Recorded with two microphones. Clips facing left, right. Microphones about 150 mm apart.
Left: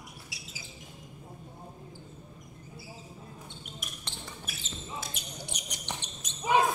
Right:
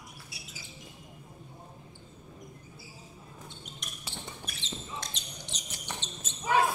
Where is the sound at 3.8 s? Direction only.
5° left (ahead or behind).